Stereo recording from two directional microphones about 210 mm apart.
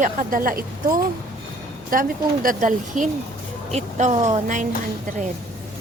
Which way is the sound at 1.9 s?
40° right (ahead or behind).